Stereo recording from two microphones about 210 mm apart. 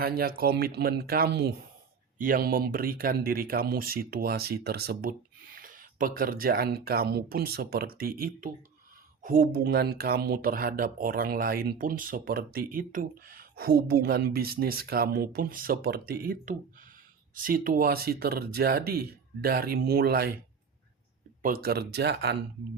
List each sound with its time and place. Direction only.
0.0 s speech: 45° right (ahead or behind)
21.4 s speech: 45° right (ahead or behind)